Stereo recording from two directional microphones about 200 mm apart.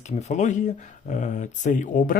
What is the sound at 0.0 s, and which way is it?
Speech, 35° left (ahead or behind).